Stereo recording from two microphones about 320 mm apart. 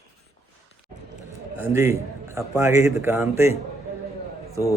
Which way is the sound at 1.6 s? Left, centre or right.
Centre.